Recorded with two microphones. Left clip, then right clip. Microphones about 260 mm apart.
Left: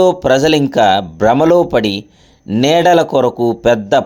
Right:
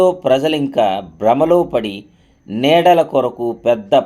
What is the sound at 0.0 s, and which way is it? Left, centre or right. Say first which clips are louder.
Speech: left 2 dB; left.